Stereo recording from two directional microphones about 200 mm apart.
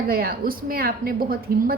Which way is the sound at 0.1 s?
50° right (ahead or behind).